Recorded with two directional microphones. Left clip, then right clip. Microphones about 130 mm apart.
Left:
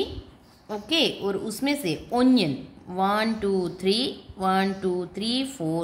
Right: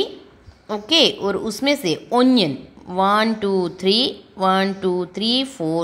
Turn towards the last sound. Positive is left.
turn(degrees=-20)  # may be behind; listen again after turning